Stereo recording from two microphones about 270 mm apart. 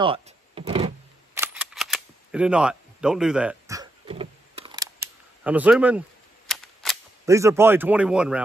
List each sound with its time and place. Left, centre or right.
0.0 s power windows: centre
1.4 s cap gun: centre
7.2 s a man's voice: centre